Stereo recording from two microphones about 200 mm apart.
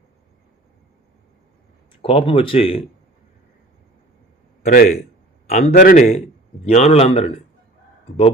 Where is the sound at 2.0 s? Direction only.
25° left (ahead or behind).